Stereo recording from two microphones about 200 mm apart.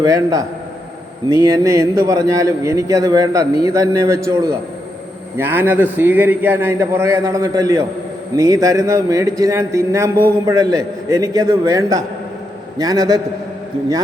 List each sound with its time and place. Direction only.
0.0 s a man's voice: 15° right (ahead or behind)
5.4 s a man's voice: 10° right (ahead or behind)